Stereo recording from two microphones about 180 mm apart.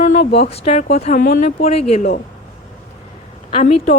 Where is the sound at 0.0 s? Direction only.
45° left (ahead or behind).